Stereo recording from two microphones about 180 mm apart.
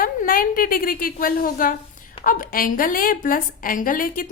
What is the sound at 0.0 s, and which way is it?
A woman's voice, 50° left (ahead or behind).